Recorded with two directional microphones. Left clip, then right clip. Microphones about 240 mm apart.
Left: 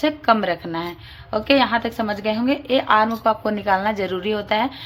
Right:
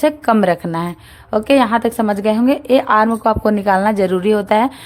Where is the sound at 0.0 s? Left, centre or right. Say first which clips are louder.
Right 4 dB; right.